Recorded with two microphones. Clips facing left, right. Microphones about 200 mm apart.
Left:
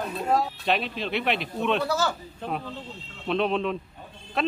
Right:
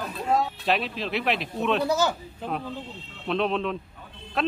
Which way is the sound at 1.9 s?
20° right (ahead or behind).